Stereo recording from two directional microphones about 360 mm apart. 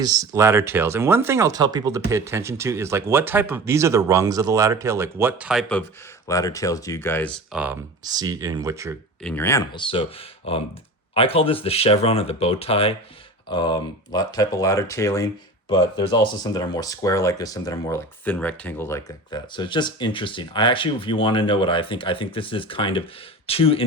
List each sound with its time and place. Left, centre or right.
0.0 s speech: centre
9.2 s speech: centre